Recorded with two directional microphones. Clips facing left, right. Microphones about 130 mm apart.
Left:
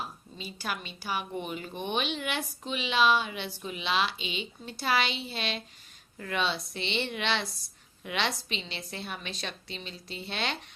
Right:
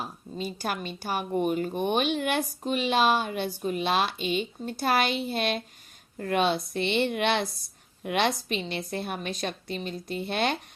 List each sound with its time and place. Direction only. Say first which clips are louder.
0.0 s speech: right 6 dB; 45° right (ahead or behind)